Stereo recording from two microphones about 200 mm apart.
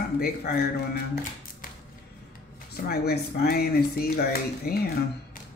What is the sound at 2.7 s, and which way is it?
Speech, 50° left (ahead or behind).